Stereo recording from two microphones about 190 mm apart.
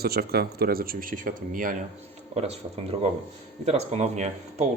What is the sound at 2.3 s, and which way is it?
Speech, 35° right (ahead or behind).